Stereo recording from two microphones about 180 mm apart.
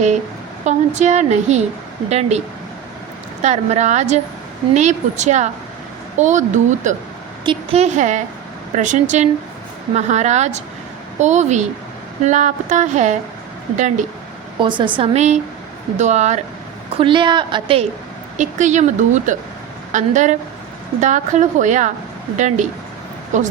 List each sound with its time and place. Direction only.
0.6 s a woman's voice: 40° right (ahead or behind)
3.4 s a woman's voice: 40° right (ahead or behind)
14.6 s a woman's voice: 25° right (ahead or behind)
17.0 s a woman's voice: 25° right (ahead or behind)
18.3 s a woman's voice: 40° right (ahead or behind)